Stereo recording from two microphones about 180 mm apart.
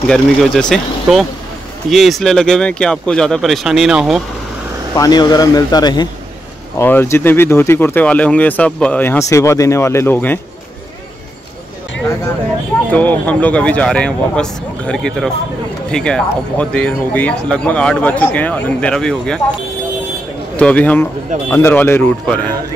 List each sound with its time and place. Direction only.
0.1 s speech: 5° left (ahead or behind)
4.9 s speech: 20° left (ahead or behind)
6.8 s speech: 10° left (ahead or behind)
12.9 s speech: 10° left (ahead or behind)
20.5 s speech: 5° left (ahead or behind)